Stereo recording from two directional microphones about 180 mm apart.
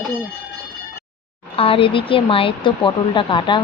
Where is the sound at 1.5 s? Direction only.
30° left (ahead or behind).